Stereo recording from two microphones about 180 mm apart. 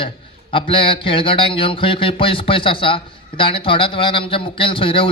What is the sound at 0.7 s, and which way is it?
Speech, 30° left (ahead or behind).